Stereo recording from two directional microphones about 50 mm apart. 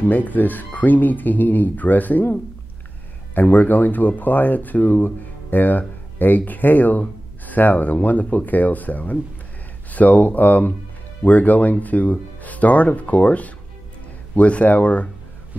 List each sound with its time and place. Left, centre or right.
0.1 s speech: left